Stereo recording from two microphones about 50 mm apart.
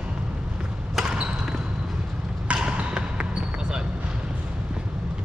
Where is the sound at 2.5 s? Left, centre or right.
Right.